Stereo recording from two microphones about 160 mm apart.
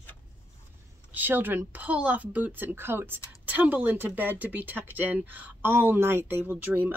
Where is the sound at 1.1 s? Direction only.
10° right (ahead or behind).